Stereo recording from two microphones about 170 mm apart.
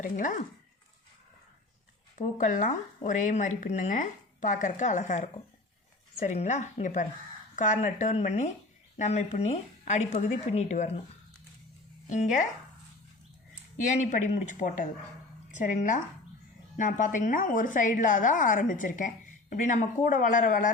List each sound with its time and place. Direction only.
0.0 s a woman's voice: 50° left (ahead or behind)
2.1 s a woman's voice: 45° left (ahead or behind)
12.0 s a woman's voice: 45° left (ahead or behind)
14.0 s a woman's voice: 45° left (ahead or behind)